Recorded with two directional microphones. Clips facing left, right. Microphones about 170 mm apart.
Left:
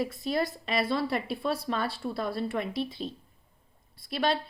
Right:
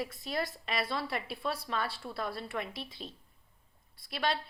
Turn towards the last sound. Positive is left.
turn(degrees=30)  # may be behind; listen again after turning